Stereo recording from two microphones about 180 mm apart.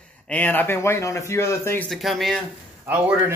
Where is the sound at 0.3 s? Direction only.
10° left (ahead or behind).